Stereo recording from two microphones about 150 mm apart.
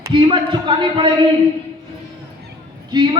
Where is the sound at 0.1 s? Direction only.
35° right (ahead or behind).